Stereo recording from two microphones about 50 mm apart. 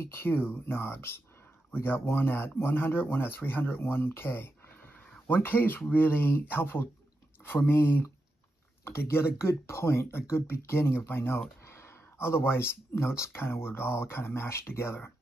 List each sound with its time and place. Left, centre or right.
0.1 s speech: left
11.6 s a sound: left
13.2 s speech: left